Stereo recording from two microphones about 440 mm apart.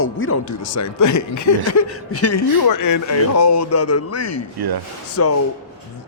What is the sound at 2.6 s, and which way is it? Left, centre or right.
Speech, left.